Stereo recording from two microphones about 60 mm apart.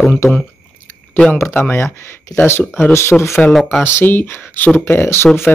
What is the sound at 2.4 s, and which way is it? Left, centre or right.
Speech, left.